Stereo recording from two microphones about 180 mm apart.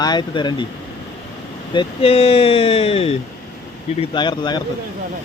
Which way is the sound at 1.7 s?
30° left (ahead or behind).